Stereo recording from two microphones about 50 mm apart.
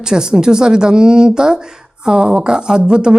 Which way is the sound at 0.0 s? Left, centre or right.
Centre.